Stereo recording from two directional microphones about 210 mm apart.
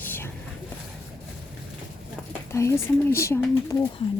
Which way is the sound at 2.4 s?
15° left (ahead or behind).